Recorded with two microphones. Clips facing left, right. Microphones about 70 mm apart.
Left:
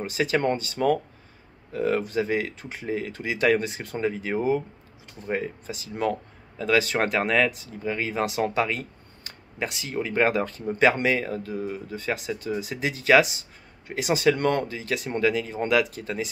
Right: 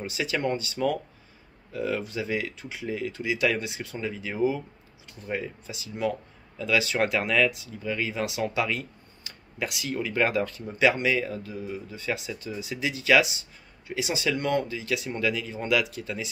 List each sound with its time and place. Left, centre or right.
0.0 s speech: left